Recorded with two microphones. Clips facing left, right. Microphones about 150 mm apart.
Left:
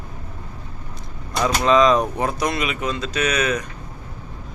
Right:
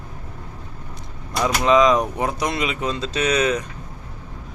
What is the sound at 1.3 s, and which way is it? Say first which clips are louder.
Speech: even; 10° right (ahead or behind).